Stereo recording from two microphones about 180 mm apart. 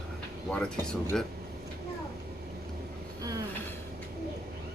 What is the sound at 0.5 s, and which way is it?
Speech, 5° left (ahead or behind).